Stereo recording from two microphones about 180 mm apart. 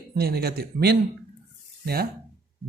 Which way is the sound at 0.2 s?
60° right (ahead or behind).